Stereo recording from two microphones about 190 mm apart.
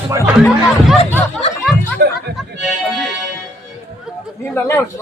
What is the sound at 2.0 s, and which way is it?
Speech, 65° right (ahead or behind).